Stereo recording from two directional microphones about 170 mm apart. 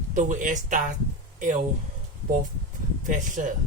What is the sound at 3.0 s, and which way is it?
Speech, 50° right (ahead or behind).